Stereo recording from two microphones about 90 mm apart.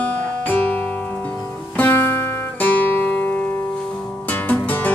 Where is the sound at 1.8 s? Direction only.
25° left (ahead or behind).